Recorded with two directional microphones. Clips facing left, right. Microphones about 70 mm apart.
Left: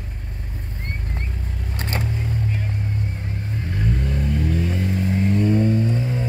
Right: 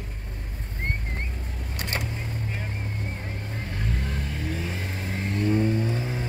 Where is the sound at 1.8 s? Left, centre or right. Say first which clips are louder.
Left 4 dB; left.